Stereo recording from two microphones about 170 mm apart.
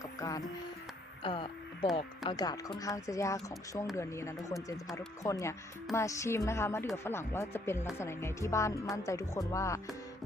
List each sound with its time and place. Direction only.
0.0 s music: 20° left (ahead or behind)
1.2 s music: 30° left (ahead or behind)
2.3 s a woman's voice: 25° left (ahead or behind)